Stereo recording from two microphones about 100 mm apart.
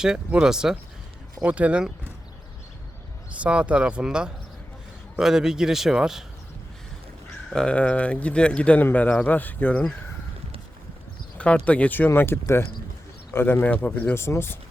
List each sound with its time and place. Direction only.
0.0 s speech: 10° right (ahead or behind)
3.4 s a man's voice: 10° right (ahead or behind)
7.5 s speech: 10° left (ahead or behind)
11.3 s speech: 10° left (ahead or behind)